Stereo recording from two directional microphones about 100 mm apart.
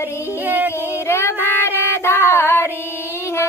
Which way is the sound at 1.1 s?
25° left (ahead or behind).